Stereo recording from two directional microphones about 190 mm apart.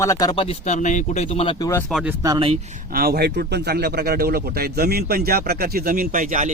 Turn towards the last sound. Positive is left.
turn(degrees=-45)  # may be behind; listen again after turning